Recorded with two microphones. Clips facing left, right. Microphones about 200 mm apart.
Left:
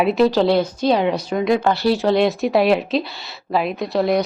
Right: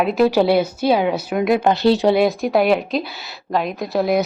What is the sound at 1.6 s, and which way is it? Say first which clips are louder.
Speech: right 3 dB; 20° right (ahead or behind).